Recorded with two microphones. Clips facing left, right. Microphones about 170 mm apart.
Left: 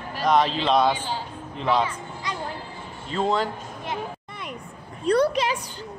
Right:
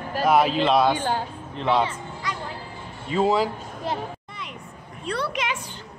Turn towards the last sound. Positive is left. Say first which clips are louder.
# left 7 dB
turn(degrees=40)  # may be behind; listen again after turning